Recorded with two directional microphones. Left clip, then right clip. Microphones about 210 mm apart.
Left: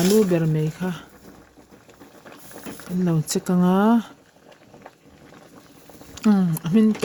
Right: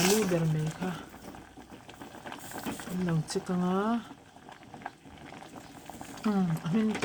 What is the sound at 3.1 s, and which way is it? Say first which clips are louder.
Speech: left 9 dB; 50° left (ahead or behind).